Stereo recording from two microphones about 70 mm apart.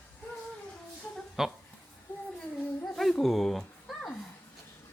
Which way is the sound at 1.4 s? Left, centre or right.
Centre.